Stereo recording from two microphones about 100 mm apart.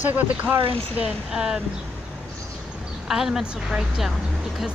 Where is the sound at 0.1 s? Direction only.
15° right (ahead or behind).